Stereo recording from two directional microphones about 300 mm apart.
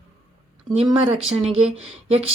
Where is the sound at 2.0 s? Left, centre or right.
Centre.